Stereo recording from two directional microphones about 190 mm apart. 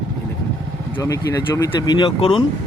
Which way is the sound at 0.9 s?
20° left (ahead or behind).